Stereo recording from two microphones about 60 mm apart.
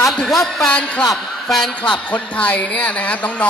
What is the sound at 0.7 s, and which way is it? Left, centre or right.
Speech, centre.